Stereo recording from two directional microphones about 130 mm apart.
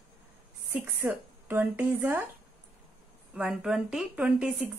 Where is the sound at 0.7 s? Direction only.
15° right (ahead or behind).